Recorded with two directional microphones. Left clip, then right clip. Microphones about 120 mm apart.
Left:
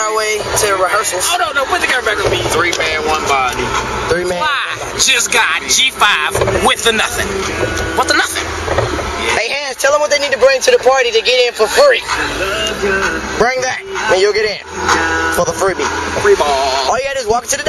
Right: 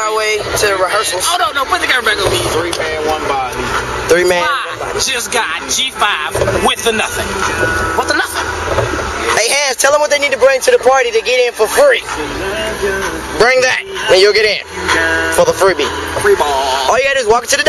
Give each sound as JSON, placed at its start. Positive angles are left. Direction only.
{"t": 0.0, "sound": "speech", "side_deg": 10}
{"t": 4.1, "sound": "speech", "side_deg": -50}
{"t": 5.0, "sound": "speech", "side_deg": 10}
{"t": 9.3, "sound": "a sound", "side_deg": -35}
{"t": 9.8, "sound": "speech", "side_deg": -10}
{"t": 13.4, "sound": "speech", "side_deg": -45}
{"t": 16.9, "sound": "speech", "side_deg": -40}